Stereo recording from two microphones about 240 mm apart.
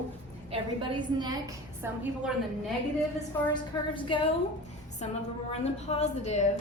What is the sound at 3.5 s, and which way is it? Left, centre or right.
Speech, centre.